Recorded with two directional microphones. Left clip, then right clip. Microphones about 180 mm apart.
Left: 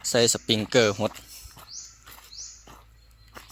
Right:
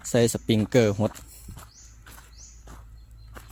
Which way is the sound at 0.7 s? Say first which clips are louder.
Left 1 dB; 20° right (ahead or behind).